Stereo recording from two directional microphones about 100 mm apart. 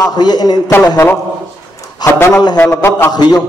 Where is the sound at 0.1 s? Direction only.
45° left (ahead or behind).